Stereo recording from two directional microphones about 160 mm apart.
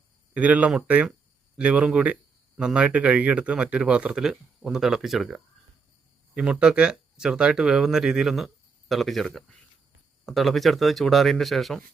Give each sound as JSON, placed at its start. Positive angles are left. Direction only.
{"t": 0.3, "sound": "speech", "side_deg": -10}